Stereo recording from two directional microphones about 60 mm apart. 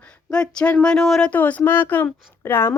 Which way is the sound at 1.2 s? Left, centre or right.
Left.